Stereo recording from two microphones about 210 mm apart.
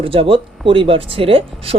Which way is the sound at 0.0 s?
25° right (ahead or behind).